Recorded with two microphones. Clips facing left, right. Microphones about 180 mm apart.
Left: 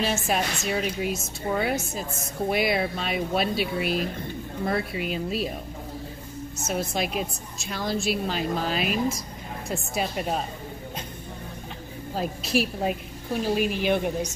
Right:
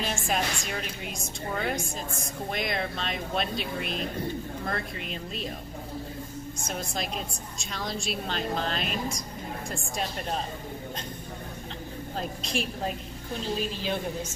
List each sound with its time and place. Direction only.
0.0 s a woman's voice: 5° left (ahead or behind)
6.7 s a woman's voice: 5° left (ahead or behind)
12.2 s a woman's voice: 5° left (ahead or behind)